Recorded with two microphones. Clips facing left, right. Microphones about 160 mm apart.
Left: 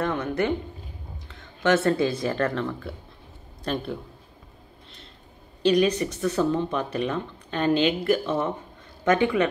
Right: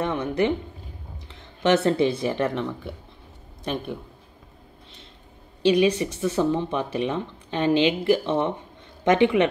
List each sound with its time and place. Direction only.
0.0 s speech: 20° right (ahead or behind)
1.3 s a sound: 25° right (ahead or behind)
1.8 s speech: 20° right (ahead or behind)
5.9 s speech: 25° right (ahead or behind)